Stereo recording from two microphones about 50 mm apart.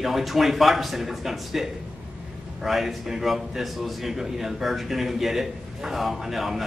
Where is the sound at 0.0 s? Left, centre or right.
Centre.